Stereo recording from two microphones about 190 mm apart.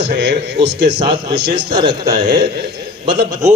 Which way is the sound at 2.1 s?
55° right (ahead or behind).